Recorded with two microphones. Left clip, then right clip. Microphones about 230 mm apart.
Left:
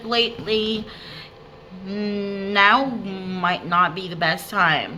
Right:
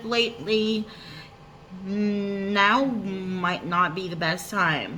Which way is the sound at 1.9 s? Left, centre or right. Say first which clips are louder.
Left 1 dB; centre.